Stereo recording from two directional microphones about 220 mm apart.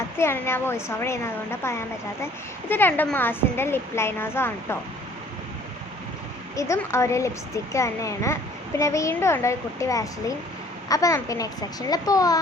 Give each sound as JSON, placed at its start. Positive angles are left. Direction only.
{"t": 0.2, "sound": "speech", "side_deg": 10}
{"t": 6.6, "sound": "speech", "side_deg": 15}